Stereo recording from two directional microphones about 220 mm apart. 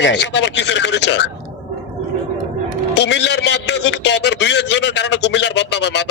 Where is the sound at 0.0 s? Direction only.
55° left (ahead or behind).